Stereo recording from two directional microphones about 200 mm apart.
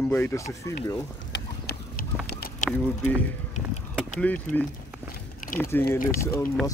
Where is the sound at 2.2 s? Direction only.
50° left (ahead or behind).